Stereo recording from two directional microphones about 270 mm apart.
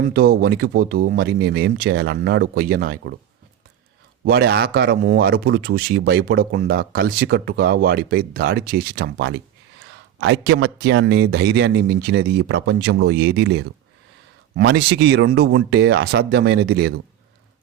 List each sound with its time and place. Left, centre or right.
0.0 s speech: right
4.3 s speech: right